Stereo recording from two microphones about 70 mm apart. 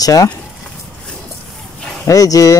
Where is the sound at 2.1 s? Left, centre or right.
Left.